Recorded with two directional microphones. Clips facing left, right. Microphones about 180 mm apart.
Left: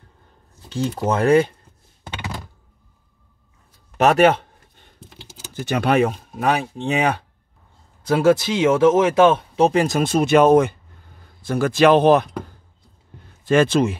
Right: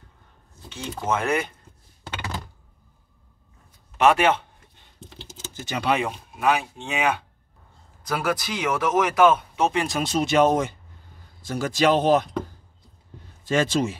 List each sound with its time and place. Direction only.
0.7 s speech: 35° left (ahead or behind)
4.0 s speech: 40° left (ahead or behind)
5.5 s speech: 55° left (ahead or behind); by 7.2 s 35° left (ahead or behind)
8.0 s speech: 25° left (ahead or behind); by 12.3 s 60° left (ahead or behind)
13.5 s speech: 60° left (ahead or behind)